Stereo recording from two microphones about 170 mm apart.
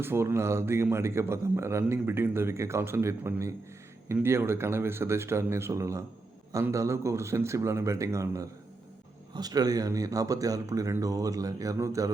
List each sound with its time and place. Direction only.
0.0 s a man's voice: 15° right (ahead or behind)